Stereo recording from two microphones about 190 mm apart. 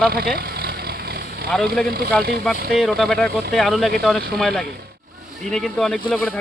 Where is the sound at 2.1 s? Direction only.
5° left (ahead or behind).